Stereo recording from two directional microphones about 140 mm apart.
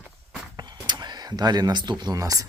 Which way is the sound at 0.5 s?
30° right (ahead or behind).